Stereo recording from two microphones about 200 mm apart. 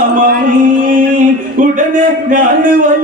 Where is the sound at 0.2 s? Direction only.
40° right (ahead or behind).